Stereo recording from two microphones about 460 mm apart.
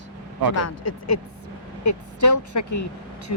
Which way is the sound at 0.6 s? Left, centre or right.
Left.